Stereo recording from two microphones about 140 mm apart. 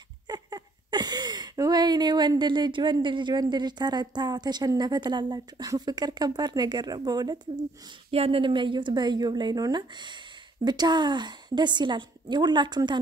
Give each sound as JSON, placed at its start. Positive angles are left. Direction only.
{"t": 0.3, "sound": "speech", "side_deg": -30}
{"t": 8.1, "sound": "a woman's voice", "side_deg": -40}